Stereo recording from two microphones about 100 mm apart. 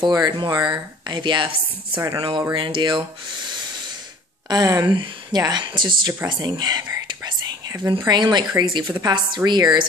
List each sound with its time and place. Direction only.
0.0 s speech: 45° right (ahead or behind)
4.5 s speech: 35° right (ahead or behind)
4.8 s speech: 50° right (ahead or behind)
6.2 s whispering: 45° right (ahead or behind)
8.1 s speech: 50° right (ahead or behind)